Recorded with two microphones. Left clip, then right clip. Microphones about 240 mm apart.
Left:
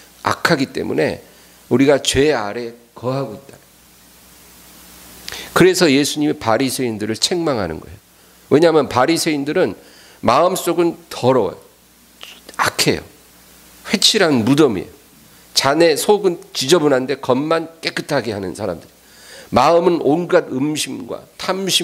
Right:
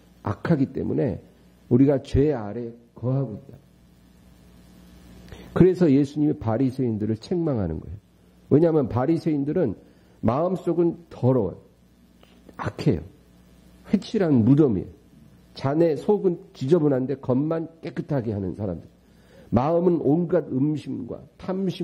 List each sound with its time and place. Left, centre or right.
0.2 s speech: centre
5.2 s speech: centre
12.2 s whispering: centre
13.8 s speech: centre
18.5 s speech: left
19.3 s speech: centre
21.0 s speech: left
21.4 s speech: centre